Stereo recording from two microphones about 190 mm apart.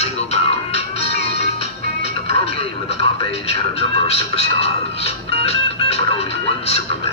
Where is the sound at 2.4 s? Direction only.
35° left (ahead or behind).